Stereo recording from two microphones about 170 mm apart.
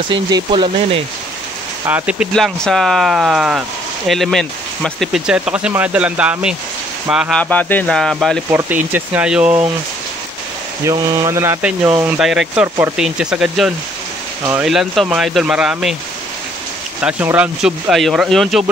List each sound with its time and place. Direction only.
0.3 s speech: 30° right (ahead or behind)
1.9 s speech: 10° right (ahead or behind)
7.3 s speech: 10° left (ahead or behind)
8.5 s speech: 15° right (ahead or behind)
10.9 s speech: 20° right (ahead or behind); by 16.0 s 5° right (ahead or behind)
17.0 s speech: 10° right (ahead or behind)